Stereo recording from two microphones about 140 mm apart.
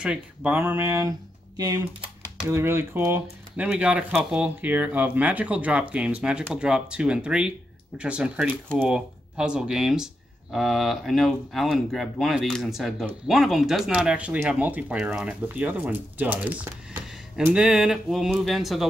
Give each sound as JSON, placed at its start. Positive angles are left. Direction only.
{"t": 0.0, "sound": "speech", "side_deg": -5}
{"t": 2.4, "sound": "speech", "side_deg": -15}
{"t": 3.6, "sound": "speech", "side_deg": -5}